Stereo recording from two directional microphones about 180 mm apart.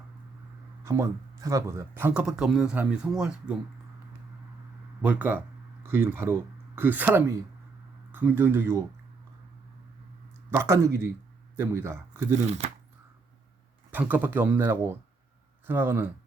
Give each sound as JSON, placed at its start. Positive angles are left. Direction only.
{"t": 0.9, "sound": "speech", "side_deg": -15}
{"t": 5.0, "sound": "speech", "side_deg": -10}
{"t": 10.5, "sound": "speech", "side_deg": -15}
{"t": 12.5, "sound": "speech", "side_deg": -35}
{"t": 13.9, "sound": "speech", "side_deg": -10}